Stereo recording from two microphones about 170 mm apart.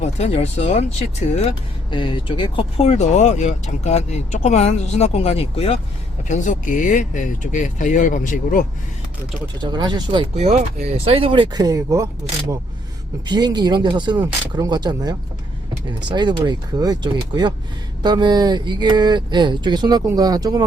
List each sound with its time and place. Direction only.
0.0 s speech: 40° left (ahead or behind)
9.6 s speech: 25° right (ahead or behind)
13.2 s speech: 25° right (ahead or behind)